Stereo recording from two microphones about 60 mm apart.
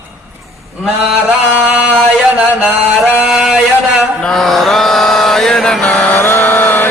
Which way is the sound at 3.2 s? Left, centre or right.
Centre.